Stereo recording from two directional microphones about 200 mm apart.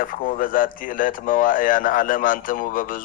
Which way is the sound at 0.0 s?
45° left (ahead or behind).